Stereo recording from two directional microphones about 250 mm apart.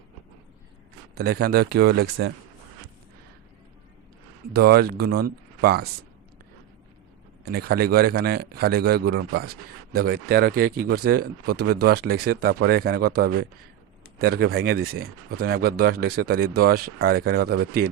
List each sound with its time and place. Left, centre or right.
1.2 s speech: right
4.5 s speech: right
7.4 s speech: right